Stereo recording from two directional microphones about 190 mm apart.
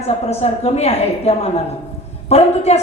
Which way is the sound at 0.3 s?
35° left (ahead or behind).